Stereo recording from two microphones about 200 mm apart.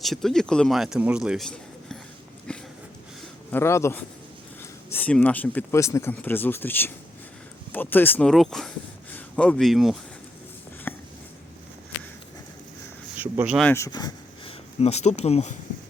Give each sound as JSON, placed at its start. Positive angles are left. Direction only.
{"t": 0.0, "sound": "speech", "side_deg": 0}
{"t": 2.5, "sound": "a sound", "side_deg": 5}
{"t": 3.5, "sound": "speech", "side_deg": 15}
{"t": 10.9, "sound": "a sound", "side_deg": 10}
{"t": 13.1, "sound": "speech", "side_deg": -10}
{"t": 13.6, "sound": "speech", "side_deg": 10}
{"t": 14.8, "sound": "speech", "side_deg": 30}